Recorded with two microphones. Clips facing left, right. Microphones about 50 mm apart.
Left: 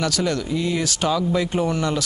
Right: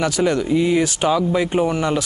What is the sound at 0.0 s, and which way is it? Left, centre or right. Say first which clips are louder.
Speech: right 4 dB; centre.